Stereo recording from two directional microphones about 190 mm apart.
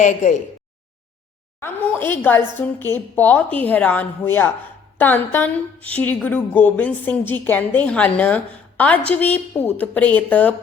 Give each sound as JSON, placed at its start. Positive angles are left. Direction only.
{"t": 0.0, "sound": "speech", "side_deg": 40}
{"t": 1.5, "sound": "a woman's voice", "side_deg": 10}